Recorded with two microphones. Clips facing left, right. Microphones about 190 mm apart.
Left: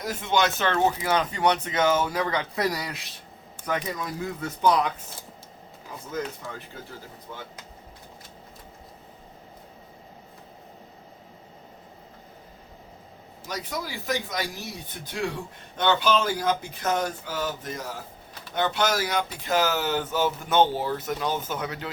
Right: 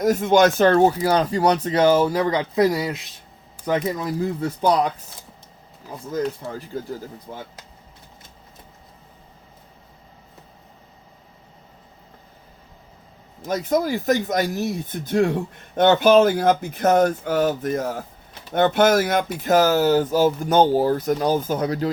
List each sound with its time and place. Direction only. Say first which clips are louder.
0.0 s speech: right 9 dB; 45° right (ahead or behind)
6.1 s speech: right 7 dB; 35° right (ahead or behind)
13.5 s speech: right 12 dB; 45° right (ahead or behind)